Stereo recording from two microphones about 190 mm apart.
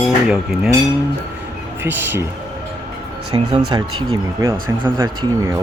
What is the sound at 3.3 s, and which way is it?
Speech, 25° right (ahead or behind).